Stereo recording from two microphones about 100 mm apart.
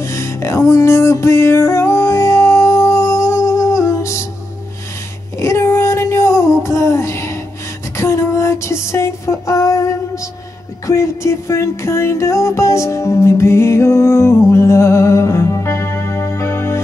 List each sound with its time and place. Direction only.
0.0 s music: 30° left (ahead or behind)
5.4 s music: 30° left (ahead or behind)